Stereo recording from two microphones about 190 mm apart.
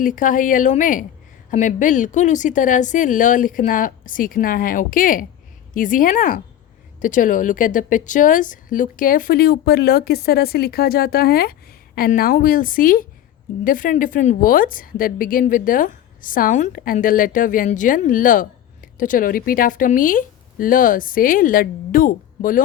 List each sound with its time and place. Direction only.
0.0 s a woman's voice: 45° left (ahead or behind)